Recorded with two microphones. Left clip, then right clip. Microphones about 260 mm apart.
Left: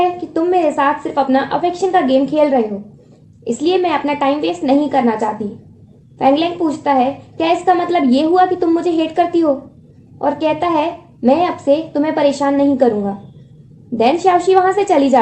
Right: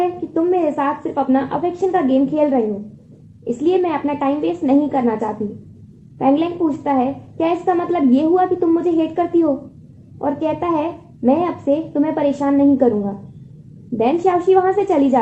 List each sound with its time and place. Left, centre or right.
0.3 s a woman's voice: left